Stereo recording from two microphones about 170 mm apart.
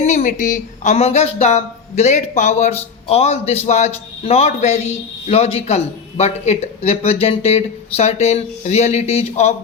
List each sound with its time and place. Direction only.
0.0 s speech: 45° left (ahead or behind)